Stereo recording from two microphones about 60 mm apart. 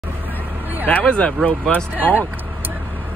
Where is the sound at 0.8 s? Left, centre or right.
Left.